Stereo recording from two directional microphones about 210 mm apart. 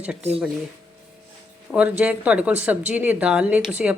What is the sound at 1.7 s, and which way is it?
Speech, 5° right (ahead or behind).